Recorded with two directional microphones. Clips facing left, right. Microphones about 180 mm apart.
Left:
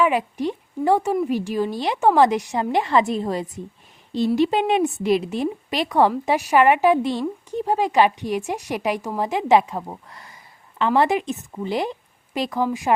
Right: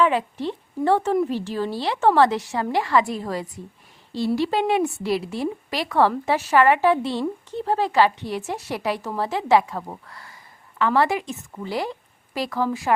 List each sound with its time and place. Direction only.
0.0 s a woman's voice: 15° left (ahead or behind)